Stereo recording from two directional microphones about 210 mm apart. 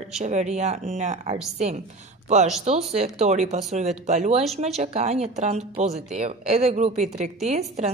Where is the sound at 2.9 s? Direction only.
30° right (ahead or behind).